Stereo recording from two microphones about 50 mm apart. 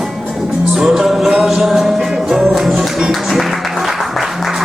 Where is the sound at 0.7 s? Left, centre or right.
Centre.